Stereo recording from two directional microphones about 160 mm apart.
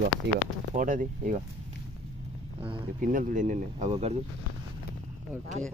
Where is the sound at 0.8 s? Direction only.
55° right (ahead or behind).